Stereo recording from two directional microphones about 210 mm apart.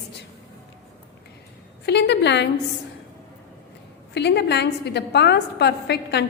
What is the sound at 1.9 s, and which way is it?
Speech, 55° left (ahead or behind).